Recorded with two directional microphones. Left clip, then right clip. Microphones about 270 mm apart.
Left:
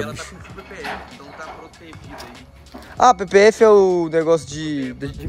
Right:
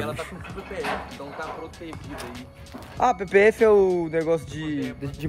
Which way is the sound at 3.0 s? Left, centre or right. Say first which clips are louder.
Left 6 dB; left.